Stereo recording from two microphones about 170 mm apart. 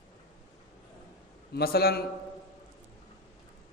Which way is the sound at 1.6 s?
65° left (ahead or behind).